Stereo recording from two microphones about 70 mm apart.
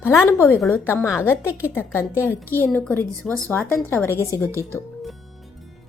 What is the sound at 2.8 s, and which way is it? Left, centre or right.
A woman's voice, left.